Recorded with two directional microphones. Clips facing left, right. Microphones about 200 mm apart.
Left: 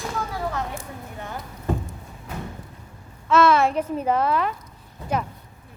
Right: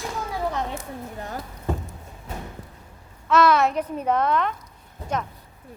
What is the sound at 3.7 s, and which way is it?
Speech, 30° left (ahead or behind).